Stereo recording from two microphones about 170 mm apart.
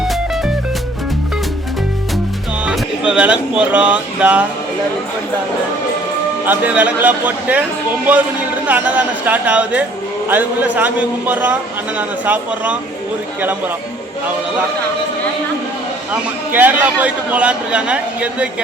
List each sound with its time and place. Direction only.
2.6 s speech: 5° right (ahead or behind)
6.4 s a man's voice: 10° right (ahead or behind)
8.6 s a man's voice: 10° right (ahead or behind)
16.5 s a man's voice: 10° right (ahead or behind)